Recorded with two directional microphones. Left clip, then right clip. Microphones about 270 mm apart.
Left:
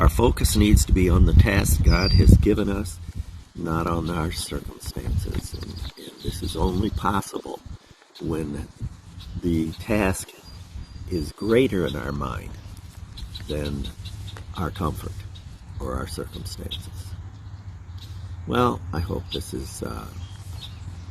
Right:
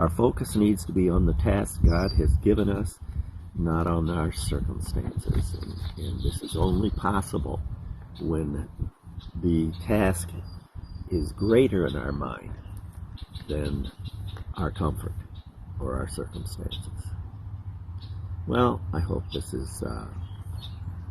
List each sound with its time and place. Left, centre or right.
0.0 s speech: centre
6.2 s speech: centre
11.4 s speech: left
13.5 s speech: centre
18.4 s speech: centre